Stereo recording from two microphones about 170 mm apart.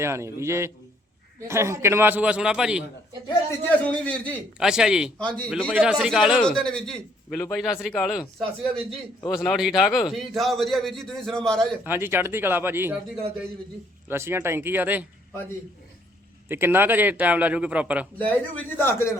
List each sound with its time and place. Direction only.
0.0 s a man's voice: 15° right (ahead or behind)
3.6 s a man's voice: 10° left (ahead or behind)
4.5 s a man's voice: 5° right (ahead or behind)
5.7 s a man's voice: 5° right (ahead or behind)
11.9 s a man's voice: 15° right (ahead or behind)
14.1 s a man's voice: 15° right (ahead or behind)
16.5 s a man's voice: 10° right (ahead or behind)
18.5 s a man's voice: 15° left (ahead or behind)